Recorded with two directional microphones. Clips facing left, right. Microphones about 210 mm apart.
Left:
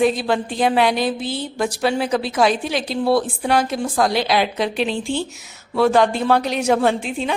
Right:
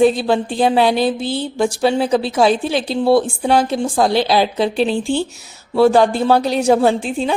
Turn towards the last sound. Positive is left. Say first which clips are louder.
# right 4 dB
turn(degrees=-35)  # may be behind; listen again after turning